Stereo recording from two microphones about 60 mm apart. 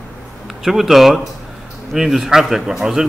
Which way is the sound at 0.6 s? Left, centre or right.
Centre.